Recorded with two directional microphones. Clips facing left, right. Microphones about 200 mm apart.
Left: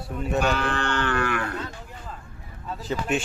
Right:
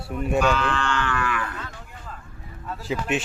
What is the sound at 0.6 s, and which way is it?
Livestock, 60° left (ahead or behind).